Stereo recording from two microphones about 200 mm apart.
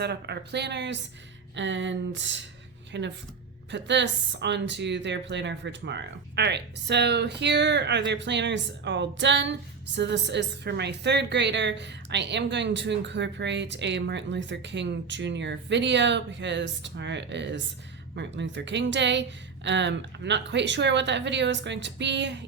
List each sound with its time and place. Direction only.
0.0 s a woman's voice: 55° right (ahead or behind)